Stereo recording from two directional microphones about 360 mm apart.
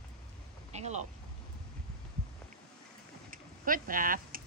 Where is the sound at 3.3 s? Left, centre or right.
Right.